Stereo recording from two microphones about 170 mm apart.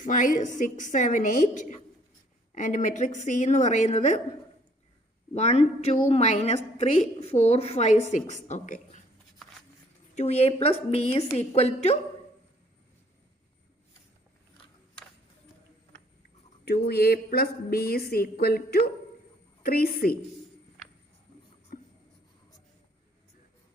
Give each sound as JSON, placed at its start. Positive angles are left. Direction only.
{"t": 0.0, "sound": "a woman's voice", "side_deg": 50}
{"t": 5.3, "sound": "a woman's voice", "side_deg": 40}
{"t": 10.2, "sound": "a woman's voice", "side_deg": 40}
{"t": 16.6, "sound": "a woman's voice", "side_deg": 70}
{"t": 21.7, "sound": "writing", "side_deg": 55}